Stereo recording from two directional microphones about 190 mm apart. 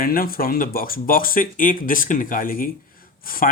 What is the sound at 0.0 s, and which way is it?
Speech, 50° left (ahead or behind).